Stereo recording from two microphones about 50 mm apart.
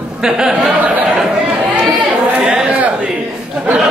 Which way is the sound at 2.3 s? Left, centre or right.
Centre.